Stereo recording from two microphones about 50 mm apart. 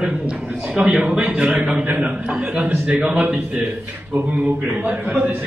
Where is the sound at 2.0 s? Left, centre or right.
Centre.